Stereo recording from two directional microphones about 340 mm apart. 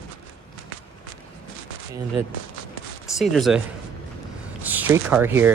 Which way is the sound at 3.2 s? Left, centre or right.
Centre.